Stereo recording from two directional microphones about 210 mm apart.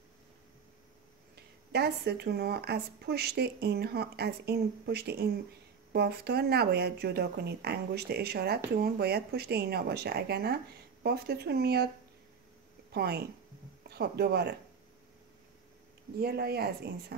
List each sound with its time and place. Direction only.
1.3 s speech: 50° right (ahead or behind)
12.9 s speech: 50° right (ahead or behind)
16.2 s speech: 50° right (ahead or behind)